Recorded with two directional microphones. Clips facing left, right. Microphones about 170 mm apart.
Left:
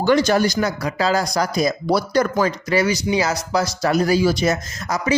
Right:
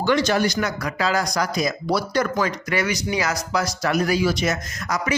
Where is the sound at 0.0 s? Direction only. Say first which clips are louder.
Left 3 dB; 40° left (ahead or behind).